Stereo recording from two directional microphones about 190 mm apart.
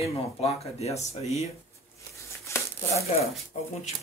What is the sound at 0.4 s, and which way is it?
Speech, 35° left (ahead or behind).